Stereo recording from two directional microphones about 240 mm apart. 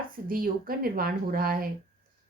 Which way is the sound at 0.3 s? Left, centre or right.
Right.